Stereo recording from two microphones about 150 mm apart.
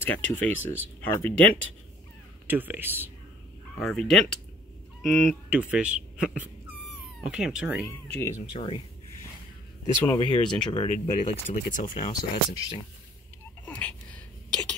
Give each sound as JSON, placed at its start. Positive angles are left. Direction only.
{"t": 0.0, "sound": "speech", "side_deg": 15}
{"t": 2.4, "sound": "speech", "side_deg": -10}
{"t": 3.8, "sound": "speech", "side_deg": 5}
{"t": 8.4, "sound": "speech", "side_deg": 35}
{"t": 10.0, "sound": "speech", "side_deg": 30}
{"t": 11.5, "sound": "speech", "side_deg": 60}
{"t": 12.1, "sound": "speech", "side_deg": 25}
{"t": 13.7, "sound": "a sound", "side_deg": 10}